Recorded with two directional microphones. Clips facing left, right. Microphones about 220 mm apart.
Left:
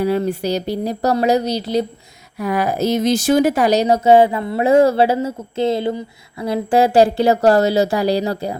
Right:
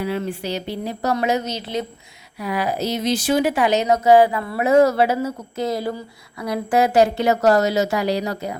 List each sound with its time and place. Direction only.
0.0 s speech: 40° left (ahead or behind)
2.4 s speech: 45° left (ahead or behind)